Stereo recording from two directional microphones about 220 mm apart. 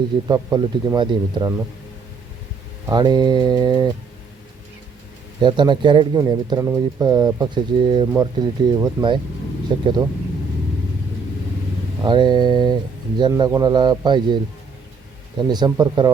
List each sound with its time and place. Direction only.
0.3 s speech: 15° right (ahead or behind)
2.8 s speech: 20° right (ahead or behind)
5.4 s speech: 20° right (ahead or behind)
12.0 s speech: 20° right (ahead or behind)
15.4 s speech: 20° right (ahead or behind)